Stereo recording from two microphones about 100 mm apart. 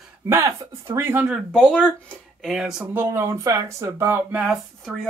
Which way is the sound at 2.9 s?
25° right (ahead or behind).